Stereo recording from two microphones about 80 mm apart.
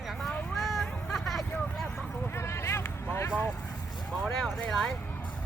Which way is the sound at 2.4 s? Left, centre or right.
Left.